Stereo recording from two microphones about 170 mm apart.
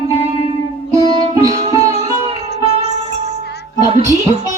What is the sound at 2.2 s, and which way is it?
Music, 35° right (ahead or behind).